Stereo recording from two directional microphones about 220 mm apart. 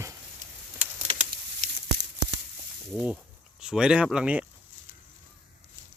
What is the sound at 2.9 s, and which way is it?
Speech, 5° right (ahead or behind).